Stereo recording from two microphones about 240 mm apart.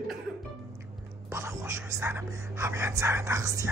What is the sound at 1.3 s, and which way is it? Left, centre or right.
Speech, centre.